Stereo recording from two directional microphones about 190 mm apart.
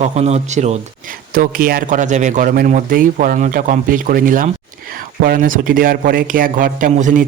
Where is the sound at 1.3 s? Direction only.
50° right (ahead or behind).